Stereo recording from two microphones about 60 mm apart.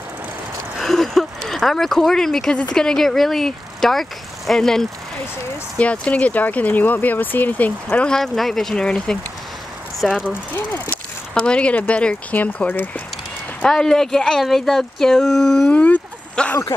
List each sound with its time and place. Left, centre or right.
0.7 s speech: centre
5.8 s speech: left
8.1 s speech: centre
10.0 s speech: centre
10.9 s speech: centre
12.6 s speech: left
13.6 s speech: centre
15.7 s a sound: left